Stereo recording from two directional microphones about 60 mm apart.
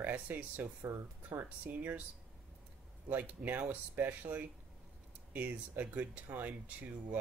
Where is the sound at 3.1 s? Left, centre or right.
Right.